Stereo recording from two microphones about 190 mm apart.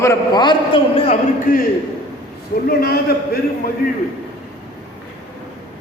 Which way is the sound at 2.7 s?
55° left (ahead or behind).